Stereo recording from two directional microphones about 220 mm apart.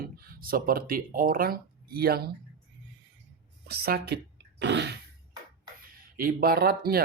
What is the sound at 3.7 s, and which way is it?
Speech, 45° right (ahead or behind).